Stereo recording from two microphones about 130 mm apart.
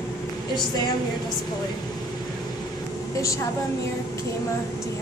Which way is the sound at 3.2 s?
25° left (ahead or behind).